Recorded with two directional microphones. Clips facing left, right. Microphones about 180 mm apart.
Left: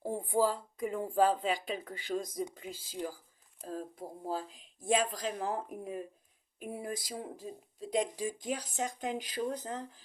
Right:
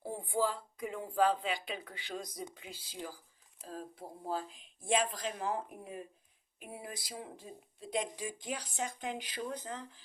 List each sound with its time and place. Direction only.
0.0 s speech: 45° left (ahead or behind)